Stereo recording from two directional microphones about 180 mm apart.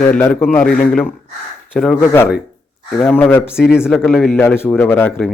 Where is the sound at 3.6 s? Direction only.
5° right (ahead or behind); by 5.2 s 10° left (ahead or behind).